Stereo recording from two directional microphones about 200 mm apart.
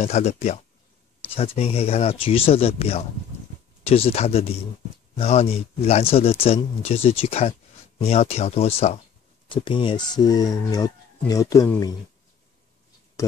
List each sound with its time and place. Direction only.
0.0 s speech: 35° left (ahead or behind); by 11.9 s 15° left (ahead or behind)